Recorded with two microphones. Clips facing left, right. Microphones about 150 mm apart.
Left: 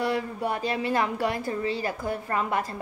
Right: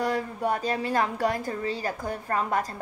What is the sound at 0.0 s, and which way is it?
A woman's voice, 45° right (ahead or behind).